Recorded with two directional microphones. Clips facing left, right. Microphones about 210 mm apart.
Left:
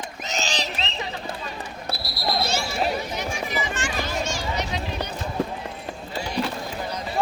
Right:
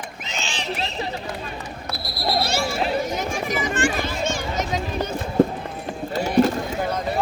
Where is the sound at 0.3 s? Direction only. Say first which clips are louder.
Left 3 dB; 40° left (ahead or behind).